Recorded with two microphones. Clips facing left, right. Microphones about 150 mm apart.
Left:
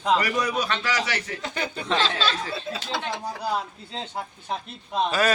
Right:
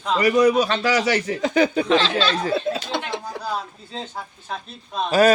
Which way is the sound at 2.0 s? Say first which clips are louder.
Right 4 dB; 5° left (ahead or behind).